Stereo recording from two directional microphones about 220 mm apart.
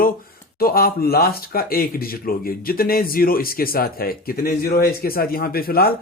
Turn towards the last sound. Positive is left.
turn(degrees=45)  # may be behind; listen again after turning